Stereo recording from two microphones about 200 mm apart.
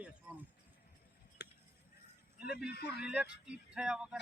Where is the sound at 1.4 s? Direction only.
55° left (ahead or behind).